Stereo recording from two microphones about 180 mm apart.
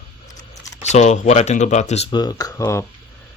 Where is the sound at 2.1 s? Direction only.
25° left (ahead or behind).